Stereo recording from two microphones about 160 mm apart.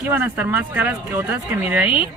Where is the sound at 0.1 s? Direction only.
10° right (ahead or behind).